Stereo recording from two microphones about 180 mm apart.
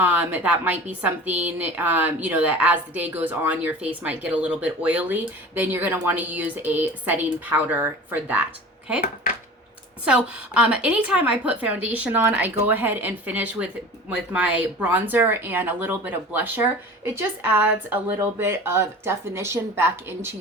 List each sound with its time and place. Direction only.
0.0 s speech: 10° right (ahead or behind)
10.1 s speech: 5° right (ahead or behind)